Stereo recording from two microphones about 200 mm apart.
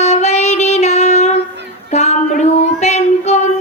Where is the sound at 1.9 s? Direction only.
35° left (ahead or behind).